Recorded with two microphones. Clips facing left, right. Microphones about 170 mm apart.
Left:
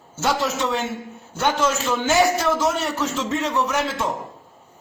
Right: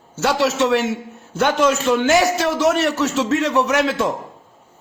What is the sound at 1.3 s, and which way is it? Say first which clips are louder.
A man's voice: right 4 dB; 60° right (ahead or behind).